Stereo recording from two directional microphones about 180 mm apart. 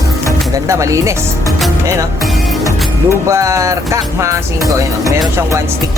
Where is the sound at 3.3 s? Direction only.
15° right (ahead or behind).